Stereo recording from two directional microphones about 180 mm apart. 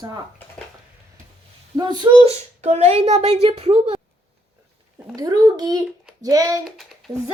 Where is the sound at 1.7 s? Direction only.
25° right (ahead or behind).